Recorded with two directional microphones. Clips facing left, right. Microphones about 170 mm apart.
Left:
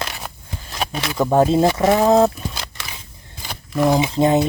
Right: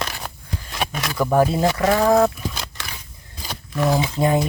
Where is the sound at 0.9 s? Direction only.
25° left (ahead or behind).